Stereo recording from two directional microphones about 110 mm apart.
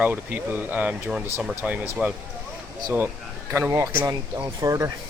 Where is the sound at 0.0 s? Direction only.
15° right (ahead or behind).